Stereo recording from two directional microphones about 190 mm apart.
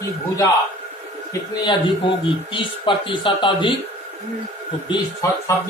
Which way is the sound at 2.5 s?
25° left (ahead or behind).